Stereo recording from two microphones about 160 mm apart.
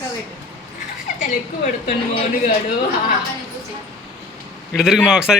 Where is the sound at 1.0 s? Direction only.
50° left (ahead or behind).